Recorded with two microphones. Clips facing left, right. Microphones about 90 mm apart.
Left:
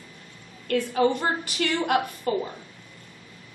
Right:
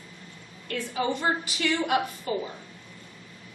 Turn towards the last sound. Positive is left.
turn(degrees=50)  # may be behind; listen again after turning